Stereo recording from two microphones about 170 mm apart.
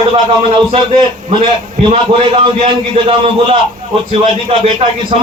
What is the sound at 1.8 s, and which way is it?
A man's voice, 35° right (ahead or behind).